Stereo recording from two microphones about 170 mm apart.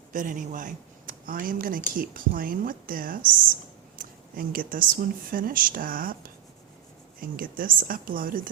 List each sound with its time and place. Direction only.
0.1 s speech: 50° right (ahead or behind)